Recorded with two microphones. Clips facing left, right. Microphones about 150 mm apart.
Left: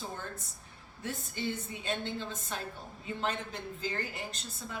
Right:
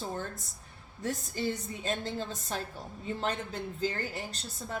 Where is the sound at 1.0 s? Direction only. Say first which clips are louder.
Right 4 dB; 40° right (ahead or behind).